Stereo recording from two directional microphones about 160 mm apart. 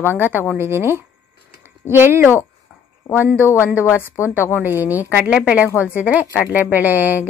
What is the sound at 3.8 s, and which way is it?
Speech, 15° left (ahead or behind).